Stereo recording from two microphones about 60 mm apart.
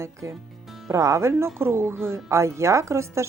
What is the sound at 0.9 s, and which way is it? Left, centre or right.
Speech, right.